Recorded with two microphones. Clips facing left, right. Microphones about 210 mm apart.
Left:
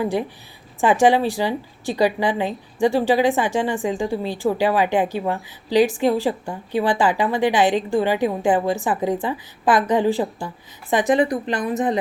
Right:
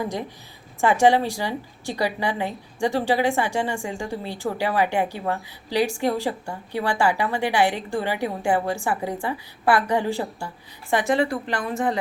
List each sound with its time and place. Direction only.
0.0 s a woman's voice: 15° left (ahead or behind)